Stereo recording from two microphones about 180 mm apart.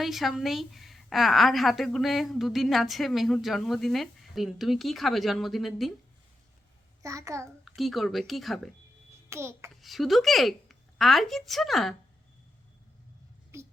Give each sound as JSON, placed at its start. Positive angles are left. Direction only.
{"t": 0.0, "sound": "a woman's voice", "side_deg": 0}
{"t": 7.0, "sound": "a child's voice", "side_deg": -20}
{"t": 7.8, "sound": "a woman's voice", "side_deg": 0}
{"t": 9.3, "sound": "a child's voice", "side_deg": -15}
{"t": 9.8, "sound": "a woman's voice", "side_deg": 0}
{"t": 13.5, "sound": "a sound", "side_deg": -15}